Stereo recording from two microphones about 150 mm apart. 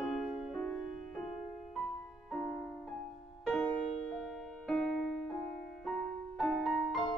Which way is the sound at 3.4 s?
5° left (ahead or behind).